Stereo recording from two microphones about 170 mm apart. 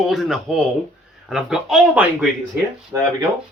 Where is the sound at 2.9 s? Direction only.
15° right (ahead or behind).